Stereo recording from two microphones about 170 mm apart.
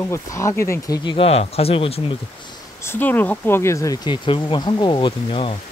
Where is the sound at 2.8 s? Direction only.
10° left (ahead or behind); by 5.5 s 30° left (ahead or behind).